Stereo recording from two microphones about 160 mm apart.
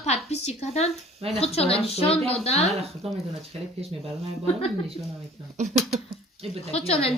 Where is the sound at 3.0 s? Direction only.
40° right (ahead or behind).